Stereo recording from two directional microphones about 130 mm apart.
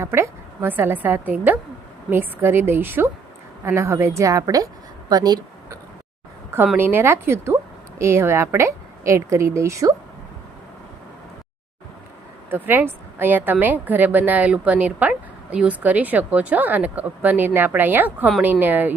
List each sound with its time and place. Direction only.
0.0 s a woman's voice: 20° right (ahead or behind)
6.7 s speech: 15° right (ahead or behind)
12.5 s a woman's voice: 15° right (ahead or behind)